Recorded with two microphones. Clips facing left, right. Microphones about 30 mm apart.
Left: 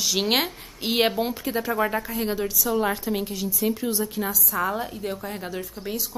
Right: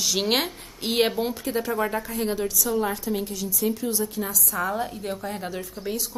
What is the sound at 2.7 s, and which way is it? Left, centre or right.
A woman's voice, left.